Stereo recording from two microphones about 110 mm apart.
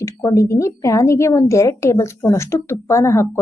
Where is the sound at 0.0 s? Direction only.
30° left (ahead or behind).